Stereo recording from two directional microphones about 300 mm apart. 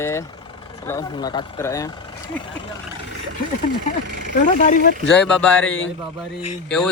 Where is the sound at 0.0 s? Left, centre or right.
Centre.